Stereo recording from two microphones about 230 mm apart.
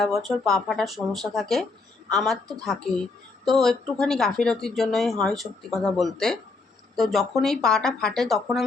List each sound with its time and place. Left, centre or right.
0.0 s speech: centre
3.4 s speech: centre